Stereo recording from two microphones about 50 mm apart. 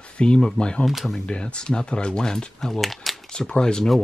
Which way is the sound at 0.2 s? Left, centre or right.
Centre.